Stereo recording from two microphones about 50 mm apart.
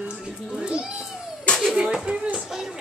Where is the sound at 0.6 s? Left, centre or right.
Centre.